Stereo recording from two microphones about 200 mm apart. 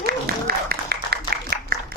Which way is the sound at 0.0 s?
50° right (ahead or behind).